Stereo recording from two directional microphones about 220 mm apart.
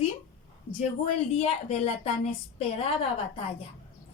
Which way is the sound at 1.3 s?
30° left (ahead or behind).